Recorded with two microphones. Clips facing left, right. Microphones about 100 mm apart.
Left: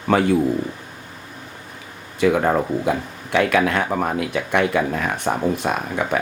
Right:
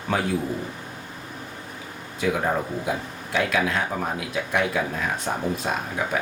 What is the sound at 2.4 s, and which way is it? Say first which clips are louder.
Speech: left 6 dB; 75° left (ahead or behind).